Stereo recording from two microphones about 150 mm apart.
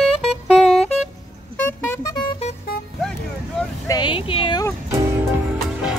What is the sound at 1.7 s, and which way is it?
Music, 20° left (ahead or behind).